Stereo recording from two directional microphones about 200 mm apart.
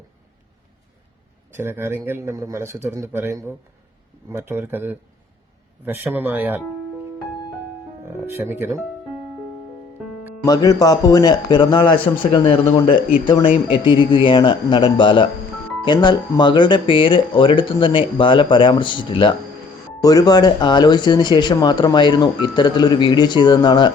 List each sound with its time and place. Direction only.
1.5 s a man's voice: 10° right (ahead or behind)
8.0 s speech: 10° right (ahead or behind)
10.4 s speech: 20° left (ahead or behind)